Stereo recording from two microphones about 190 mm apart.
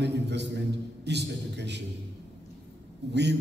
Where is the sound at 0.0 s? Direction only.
65° right (ahead or behind).